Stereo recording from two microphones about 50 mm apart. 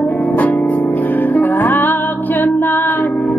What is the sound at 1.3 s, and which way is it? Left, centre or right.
Music, left.